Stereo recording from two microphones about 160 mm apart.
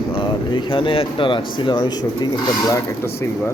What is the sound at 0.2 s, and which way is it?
Speech, 30° left (ahead or behind).